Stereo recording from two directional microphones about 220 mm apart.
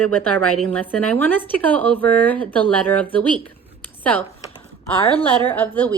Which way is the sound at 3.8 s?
5° left (ahead or behind).